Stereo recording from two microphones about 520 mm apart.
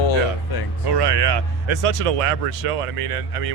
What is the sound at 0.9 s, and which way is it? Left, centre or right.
Speech, right.